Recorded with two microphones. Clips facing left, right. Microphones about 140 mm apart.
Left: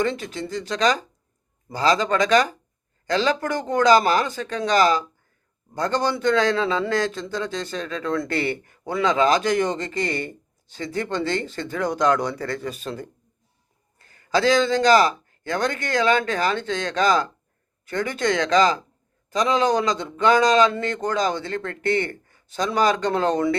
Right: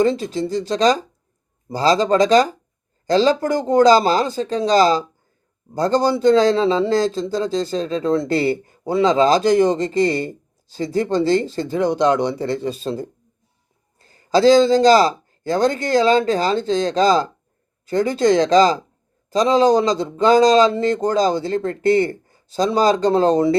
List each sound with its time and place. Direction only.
0.0 s a man's voice: 35° right (ahead or behind)